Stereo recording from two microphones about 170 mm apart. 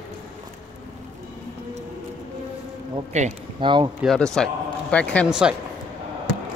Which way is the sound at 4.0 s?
5° left (ahead or behind).